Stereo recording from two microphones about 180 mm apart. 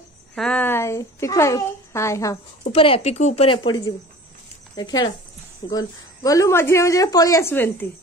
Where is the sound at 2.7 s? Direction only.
30° left (ahead or behind); by 7.9 s 10° left (ahead or behind).